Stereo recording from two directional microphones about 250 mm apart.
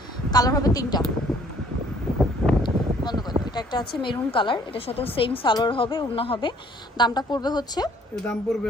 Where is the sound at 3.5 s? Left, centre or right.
Centre.